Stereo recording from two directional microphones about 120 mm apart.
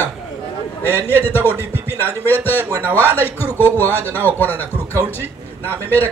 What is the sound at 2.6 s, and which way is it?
Music, 20° right (ahead or behind).